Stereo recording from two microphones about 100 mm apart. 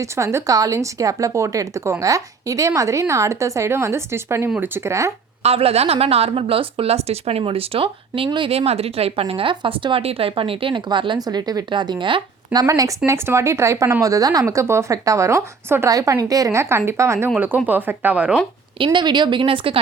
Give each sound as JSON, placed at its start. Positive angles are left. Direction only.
{"t": 0.0, "sound": "speech", "side_deg": -30}
{"t": 5.4, "sound": "a woman's voice", "side_deg": -85}
{"t": 8.5, "sound": "speech", "side_deg": -90}
{"t": 12.5, "sound": "speech", "side_deg": -35}
{"t": 18.8, "sound": "speech", "side_deg": -50}